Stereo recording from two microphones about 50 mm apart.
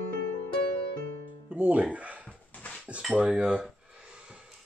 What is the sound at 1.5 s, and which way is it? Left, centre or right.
Music, right.